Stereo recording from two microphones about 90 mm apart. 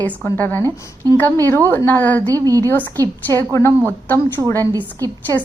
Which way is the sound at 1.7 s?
25° left (ahead or behind).